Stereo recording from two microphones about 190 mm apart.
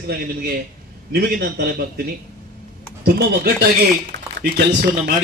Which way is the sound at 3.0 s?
55° right (ahead or behind).